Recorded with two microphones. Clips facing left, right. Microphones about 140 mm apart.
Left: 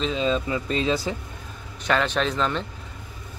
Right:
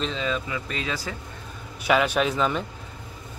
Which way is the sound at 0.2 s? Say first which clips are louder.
Left 4 dB; 30° left (ahead or behind).